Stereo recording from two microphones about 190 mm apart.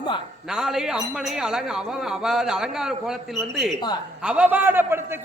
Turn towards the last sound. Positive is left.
turn(degrees=-10)  # may be behind; listen again after turning